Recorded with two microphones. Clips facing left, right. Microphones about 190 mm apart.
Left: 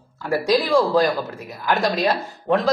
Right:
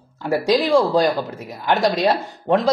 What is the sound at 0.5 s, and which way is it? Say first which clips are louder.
A man's voice: even; 15° right (ahead or behind).